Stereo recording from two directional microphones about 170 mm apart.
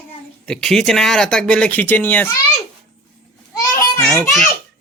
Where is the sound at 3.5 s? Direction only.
15° left (ahead or behind).